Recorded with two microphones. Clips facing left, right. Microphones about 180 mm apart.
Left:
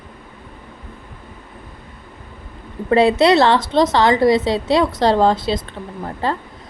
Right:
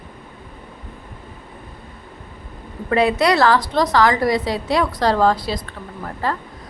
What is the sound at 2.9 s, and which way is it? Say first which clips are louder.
A woman's voice: left 4 dB; 30° left (ahead or behind).